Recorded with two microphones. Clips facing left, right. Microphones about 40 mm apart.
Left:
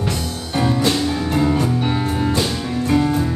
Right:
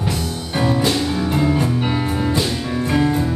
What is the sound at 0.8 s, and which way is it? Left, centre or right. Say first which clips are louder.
Music: even; centre.